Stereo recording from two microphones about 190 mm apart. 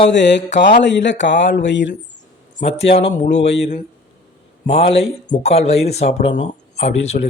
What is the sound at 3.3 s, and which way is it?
Speech, 70° left (ahead or behind).